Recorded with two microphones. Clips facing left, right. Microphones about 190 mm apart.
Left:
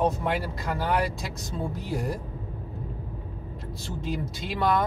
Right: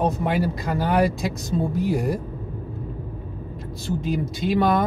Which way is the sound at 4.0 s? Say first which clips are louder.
Right 4 dB; 15° right (ahead or behind).